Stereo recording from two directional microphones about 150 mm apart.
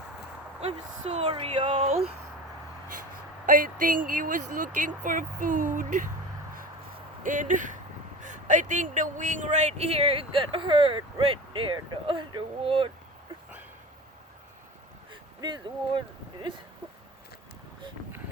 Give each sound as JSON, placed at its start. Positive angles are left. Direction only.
{"t": 0.6, "sound": "speech", "side_deg": -45}
{"t": 3.4, "sound": "speech", "side_deg": -65}
{"t": 7.2, "sound": "speech", "side_deg": -60}
{"t": 15.1, "sound": "speech", "side_deg": -30}